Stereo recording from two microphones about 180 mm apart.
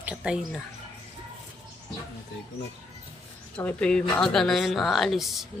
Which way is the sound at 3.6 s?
5° left (ahead or behind).